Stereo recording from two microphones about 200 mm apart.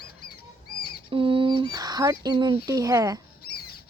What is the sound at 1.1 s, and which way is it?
A child's voice, 25° right (ahead or behind).